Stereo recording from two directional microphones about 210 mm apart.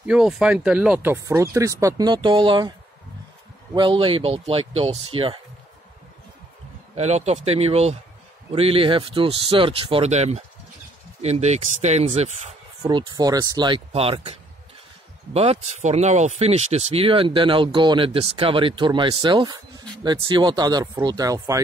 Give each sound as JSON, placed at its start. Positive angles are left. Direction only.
{"t": 0.0, "sound": "speech", "side_deg": -5}
{"t": 3.7, "sound": "speech", "side_deg": -25}
{"t": 7.0, "sound": "speech", "side_deg": -30}
{"t": 12.8, "sound": "speech", "side_deg": -20}
{"t": 15.3, "sound": "speech", "side_deg": -30}